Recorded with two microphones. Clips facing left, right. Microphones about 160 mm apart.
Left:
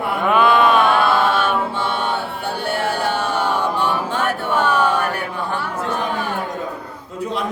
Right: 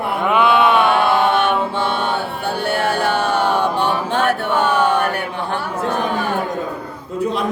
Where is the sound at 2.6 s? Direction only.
65° right (ahead or behind).